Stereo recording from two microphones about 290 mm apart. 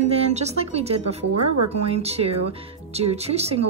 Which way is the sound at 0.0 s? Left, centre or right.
Right.